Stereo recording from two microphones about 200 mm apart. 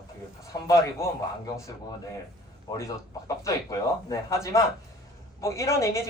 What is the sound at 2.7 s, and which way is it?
Speech, 20° left (ahead or behind).